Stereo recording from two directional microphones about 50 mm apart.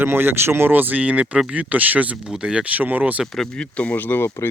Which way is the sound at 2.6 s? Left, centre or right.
Right.